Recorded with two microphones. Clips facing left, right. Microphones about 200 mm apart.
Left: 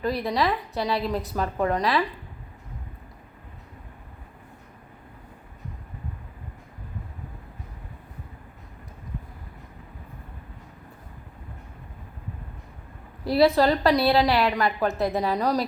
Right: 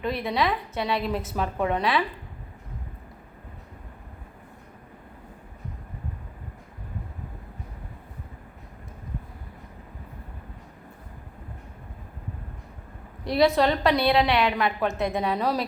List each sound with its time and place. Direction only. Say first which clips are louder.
0.0 s a woman's voice: left 1 dB; centre (ahead or behind)
13.2 s a woman's voice: left 2 dB; 5° left (ahead or behind)